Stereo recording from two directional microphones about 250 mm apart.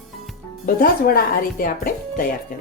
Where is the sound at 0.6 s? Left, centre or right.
Left.